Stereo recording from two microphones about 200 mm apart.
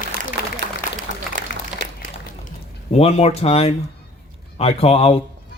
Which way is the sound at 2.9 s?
30° left (ahead or behind).